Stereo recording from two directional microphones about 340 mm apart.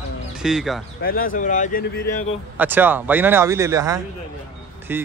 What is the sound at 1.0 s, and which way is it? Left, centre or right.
Speech, left.